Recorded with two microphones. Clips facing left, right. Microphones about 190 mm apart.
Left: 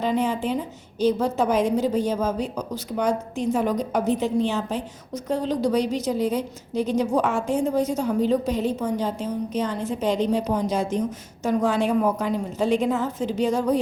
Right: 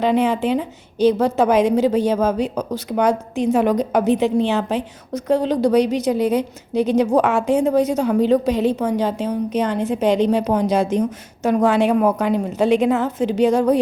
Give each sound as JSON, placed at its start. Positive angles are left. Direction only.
{"t": 0.0, "sound": "a woman's voice", "side_deg": -75}